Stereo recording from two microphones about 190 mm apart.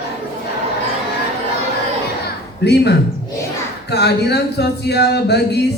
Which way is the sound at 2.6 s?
60° left (ahead or behind).